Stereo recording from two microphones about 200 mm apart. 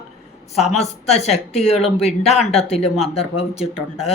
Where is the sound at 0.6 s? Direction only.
30° left (ahead or behind).